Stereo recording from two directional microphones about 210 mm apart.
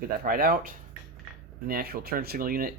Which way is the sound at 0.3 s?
45° right (ahead or behind).